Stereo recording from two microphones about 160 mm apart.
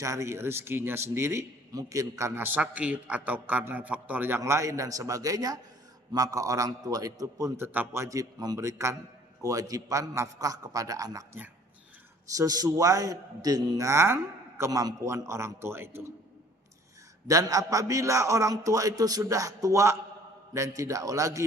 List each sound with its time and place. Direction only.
0.0 s a man's voice: 20° right (ahead or behind)
12.3 s a man's voice: 20° right (ahead or behind)
17.2 s a man's voice: 20° right (ahead or behind)